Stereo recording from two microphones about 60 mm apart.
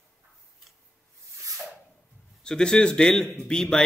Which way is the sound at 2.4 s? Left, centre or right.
Centre.